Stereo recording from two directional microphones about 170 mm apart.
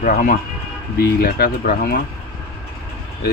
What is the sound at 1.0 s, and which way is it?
Speech, 65° left (ahead or behind).